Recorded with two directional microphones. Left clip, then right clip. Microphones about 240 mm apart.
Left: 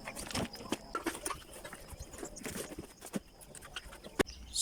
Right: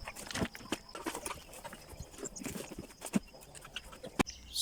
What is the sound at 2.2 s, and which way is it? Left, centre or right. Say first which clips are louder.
Clip-clop: right 1 dB; centre.